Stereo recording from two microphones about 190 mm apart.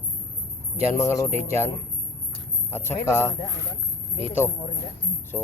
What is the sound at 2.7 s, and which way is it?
Speech, 15° left (ahead or behind).